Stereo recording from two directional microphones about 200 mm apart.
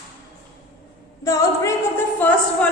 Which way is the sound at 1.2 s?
15° left (ahead or behind).